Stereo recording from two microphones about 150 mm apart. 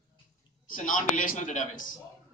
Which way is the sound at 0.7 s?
60° left (ahead or behind).